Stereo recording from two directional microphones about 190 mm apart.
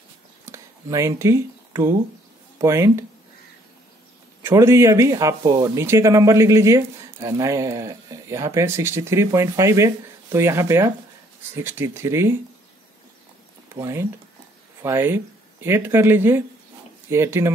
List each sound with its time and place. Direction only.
0.5 s a sound: 15° right (ahead or behind)
2.6 s speech: 15° right (ahead or behind)
4.4 s speech: 15° right (ahead or behind)
13.7 s speech: 15° right (ahead or behind)